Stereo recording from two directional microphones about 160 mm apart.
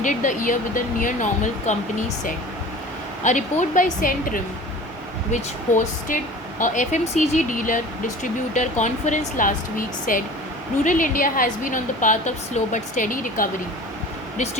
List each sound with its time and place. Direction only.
0.0 s a woman's voice: 55° left (ahead or behind)